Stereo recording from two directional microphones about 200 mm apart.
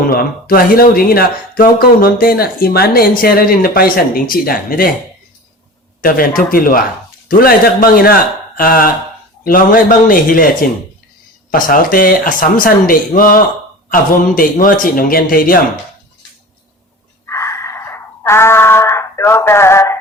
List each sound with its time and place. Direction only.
0.0 s speech: 45° left (ahead or behind)
6.0 s speech: 45° left (ahead or behind)
11.5 s speech: 45° left (ahead or behind)
17.2 s a sound: 15° left (ahead or behind)